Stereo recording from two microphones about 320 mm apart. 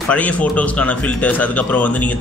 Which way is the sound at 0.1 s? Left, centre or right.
Centre.